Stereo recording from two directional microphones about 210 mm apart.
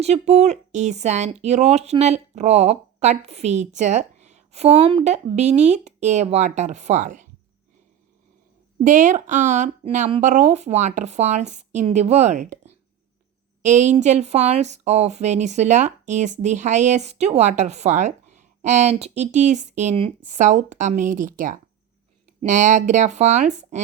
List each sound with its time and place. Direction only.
0.0 s speech: 30° right (ahead or behind)
8.8 s speech: 35° right (ahead or behind)
13.6 s speech: 35° right (ahead or behind)